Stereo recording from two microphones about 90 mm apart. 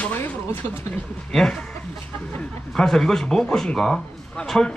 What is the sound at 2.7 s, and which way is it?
A man's voice, 5° left (ahead or behind).